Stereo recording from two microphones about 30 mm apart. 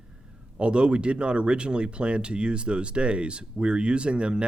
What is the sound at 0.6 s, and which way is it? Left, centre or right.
Speech, right.